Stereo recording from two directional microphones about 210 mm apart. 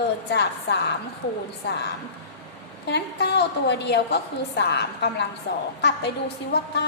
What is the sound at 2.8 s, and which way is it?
A woman's voice, 50° left (ahead or behind).